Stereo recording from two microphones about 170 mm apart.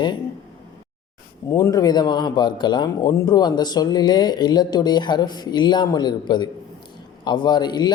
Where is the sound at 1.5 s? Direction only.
20° left (ahead or behind).